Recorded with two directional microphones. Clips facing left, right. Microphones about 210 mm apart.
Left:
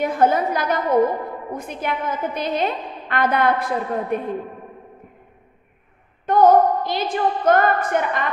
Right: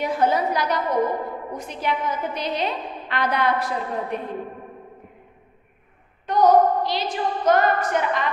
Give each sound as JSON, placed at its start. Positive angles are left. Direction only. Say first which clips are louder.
{"t": 0.0, "sound": "a woman's voice", "louder": "left 3 dB", "side_deg": 50}
{"t": 6.2, "sound": "a woman's voice", "louder": "left 2 dB", "side_deg": 50}